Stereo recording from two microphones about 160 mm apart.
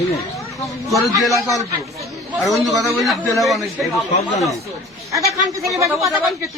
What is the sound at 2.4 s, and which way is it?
A man's voice, centre (ahead or behind).